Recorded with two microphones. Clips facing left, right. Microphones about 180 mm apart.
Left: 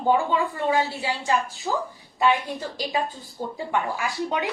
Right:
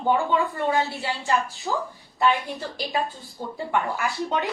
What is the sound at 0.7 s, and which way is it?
A woman's voice, 15° left (ahead or behind).